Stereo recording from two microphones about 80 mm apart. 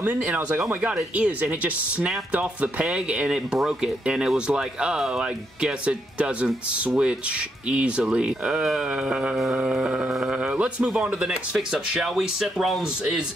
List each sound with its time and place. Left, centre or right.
0.2 s speech: centre